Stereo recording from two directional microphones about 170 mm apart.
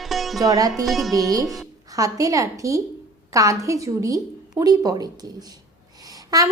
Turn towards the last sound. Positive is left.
turn(degrees=-20)  # may be behind; listen again after turning